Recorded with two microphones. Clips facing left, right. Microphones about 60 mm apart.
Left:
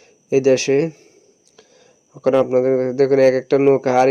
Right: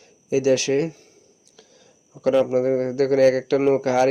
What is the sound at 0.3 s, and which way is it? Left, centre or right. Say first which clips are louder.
Speech: left 5 dB; left.